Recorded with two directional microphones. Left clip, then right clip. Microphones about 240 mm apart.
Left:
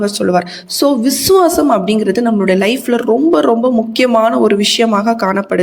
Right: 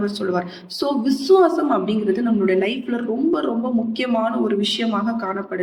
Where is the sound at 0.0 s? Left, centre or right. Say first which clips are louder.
Left 9 dB; left.